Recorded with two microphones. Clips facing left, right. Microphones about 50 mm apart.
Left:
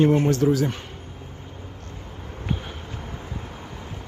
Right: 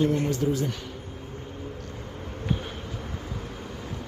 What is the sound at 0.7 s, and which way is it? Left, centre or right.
Speech, left.